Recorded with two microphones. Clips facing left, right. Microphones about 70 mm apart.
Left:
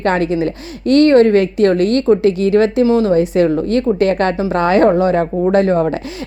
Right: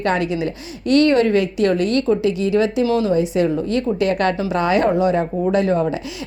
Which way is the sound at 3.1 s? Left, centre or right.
Left.